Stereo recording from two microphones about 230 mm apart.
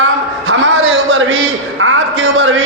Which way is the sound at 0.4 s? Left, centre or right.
Right.